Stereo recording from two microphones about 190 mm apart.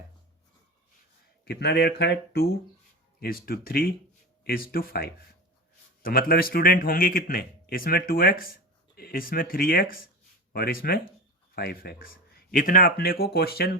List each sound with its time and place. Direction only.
1.5 s speech: 60° left (ahead or behind)
3.2 s a man's voice: 50° left (ahead or behind)